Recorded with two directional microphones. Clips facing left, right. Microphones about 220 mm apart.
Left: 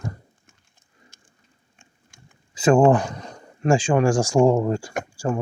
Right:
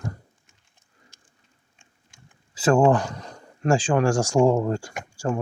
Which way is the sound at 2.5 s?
15° left (ahead or behind).